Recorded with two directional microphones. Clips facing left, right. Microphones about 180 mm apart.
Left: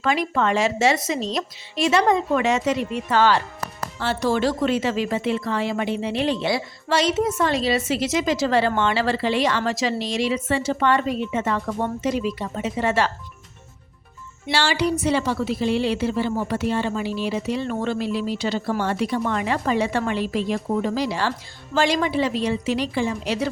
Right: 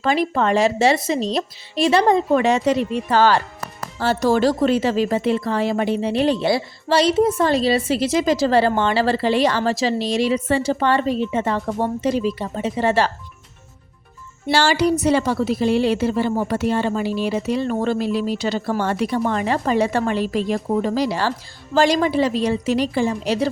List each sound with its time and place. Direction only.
0.0 s a woman's voice: 35° right (ahead or behind)
14.4 s a woman's voice: 45° right (ahead or behind)